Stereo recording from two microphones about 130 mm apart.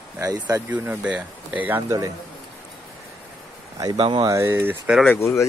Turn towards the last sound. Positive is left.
turn(degrees=20)  # may be behind; listen again after turning